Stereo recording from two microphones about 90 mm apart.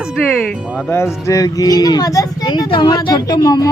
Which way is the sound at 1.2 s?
40° left (ahead or behind).